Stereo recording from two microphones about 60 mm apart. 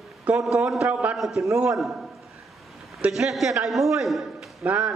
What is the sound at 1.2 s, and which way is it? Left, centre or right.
Speech, centre.